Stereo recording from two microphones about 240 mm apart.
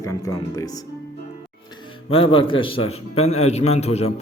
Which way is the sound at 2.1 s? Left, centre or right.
Left.